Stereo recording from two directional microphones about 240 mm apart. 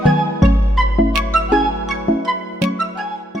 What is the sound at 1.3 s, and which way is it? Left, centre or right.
Music, centre.